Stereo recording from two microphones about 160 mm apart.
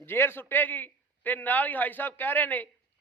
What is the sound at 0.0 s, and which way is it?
A man's voice, 15° left (ahead or behind).